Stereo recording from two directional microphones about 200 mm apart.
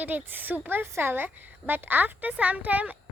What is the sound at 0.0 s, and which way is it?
A woman's voice, 10° right (ahead or behind).